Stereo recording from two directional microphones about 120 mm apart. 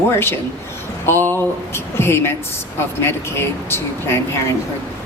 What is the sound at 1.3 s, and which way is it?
A woman's voice, 20° left (ahead or behind).